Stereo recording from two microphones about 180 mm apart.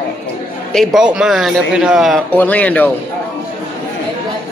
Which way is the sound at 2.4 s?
10° left (ahead or behind).